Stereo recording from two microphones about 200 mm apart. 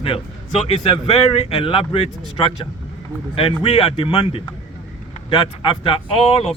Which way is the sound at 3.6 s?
30° left (ahead or behind).